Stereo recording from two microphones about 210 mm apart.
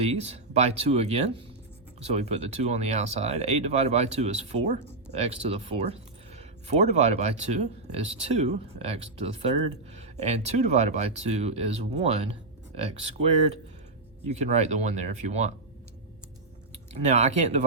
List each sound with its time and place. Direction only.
0.0 s speech: 30° right (ahead or behind)
16.7 s speech: 30° right (ahead or behind)